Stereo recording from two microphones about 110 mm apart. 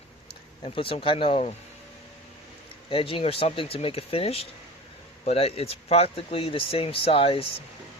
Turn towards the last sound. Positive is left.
turn(degrees=55)  # may be behind; listen again after turning